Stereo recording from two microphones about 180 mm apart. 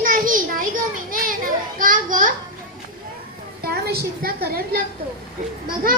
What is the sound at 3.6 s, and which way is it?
A woman's voice, 60° right (ahead or behind).